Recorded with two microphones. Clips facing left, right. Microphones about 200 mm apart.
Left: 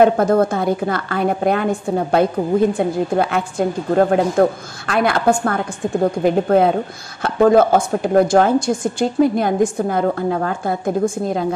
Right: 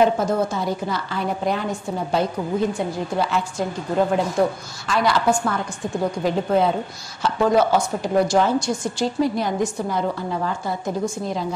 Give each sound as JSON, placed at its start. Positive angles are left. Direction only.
{"t": 0.0, "sound": "a woman's voice", "side_deg": 55}